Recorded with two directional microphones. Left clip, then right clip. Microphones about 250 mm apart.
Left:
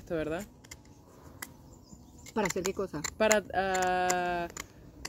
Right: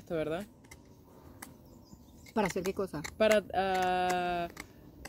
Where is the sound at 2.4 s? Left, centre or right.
Right.